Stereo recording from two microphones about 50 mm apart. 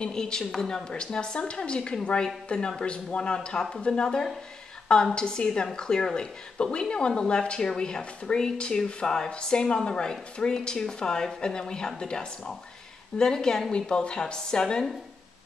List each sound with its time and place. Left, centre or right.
0.0 s a woman's voice: centre